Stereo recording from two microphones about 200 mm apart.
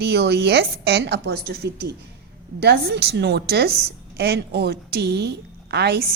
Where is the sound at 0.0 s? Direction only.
55° right (ahead or behind).